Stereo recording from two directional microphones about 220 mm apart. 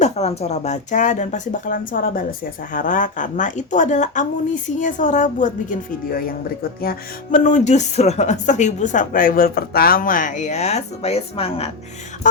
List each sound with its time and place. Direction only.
0.0 s speech: 30° left (ahead or behind)
6.8 s speech: 35° left (ahead or behind)